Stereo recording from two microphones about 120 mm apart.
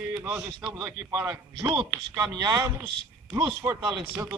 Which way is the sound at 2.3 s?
30° right (ahead or behind).